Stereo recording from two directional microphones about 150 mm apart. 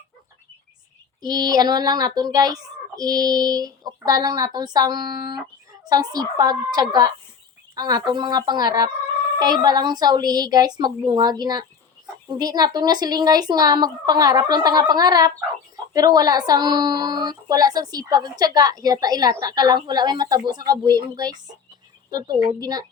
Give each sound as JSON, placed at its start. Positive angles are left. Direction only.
{"t": 1.2, "sound": "speech", "side_deg": -25}